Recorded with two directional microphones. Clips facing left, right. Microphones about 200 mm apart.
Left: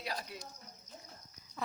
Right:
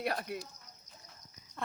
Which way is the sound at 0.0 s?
60° right (ahead or behind).